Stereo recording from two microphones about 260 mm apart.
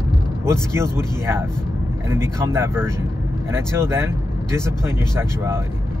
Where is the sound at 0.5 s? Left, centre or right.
Centre.